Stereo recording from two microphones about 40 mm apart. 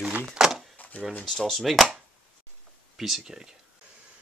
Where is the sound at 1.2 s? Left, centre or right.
Centre.